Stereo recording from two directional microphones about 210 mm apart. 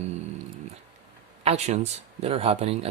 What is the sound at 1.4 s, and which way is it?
Speech, 30° right (ahead or behind).